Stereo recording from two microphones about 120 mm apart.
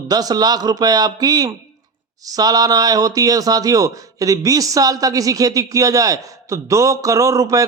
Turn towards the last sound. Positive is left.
turn(degrees=-25)  # may be behind; listen again after turning